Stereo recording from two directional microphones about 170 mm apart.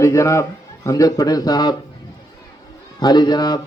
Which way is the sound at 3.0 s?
25° left (ahead or behind).